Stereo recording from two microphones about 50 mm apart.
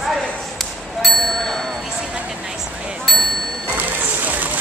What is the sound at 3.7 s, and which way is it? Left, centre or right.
Music, right.